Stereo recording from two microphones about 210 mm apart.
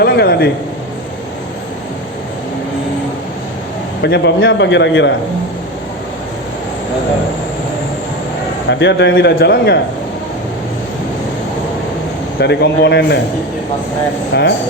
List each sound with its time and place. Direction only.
0.0 s a man's voice: 50° left (ahead or behind)
4.0 s a man's voice: 55° left (ahead or behind)
8.7 s a man's voice: 55° left (ahead or behind)
12.4 s a man's voice: 55° left (ahead or behind)
14.3 s a man's voice: 50° left (ahead or behind)